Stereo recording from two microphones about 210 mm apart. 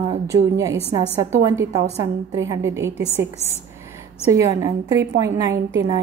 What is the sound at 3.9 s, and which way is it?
A woman's voice, 15° right (ahead or behind).